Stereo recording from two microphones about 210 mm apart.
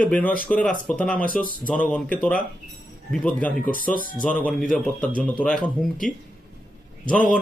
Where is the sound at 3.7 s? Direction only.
40° left (ahead or behind).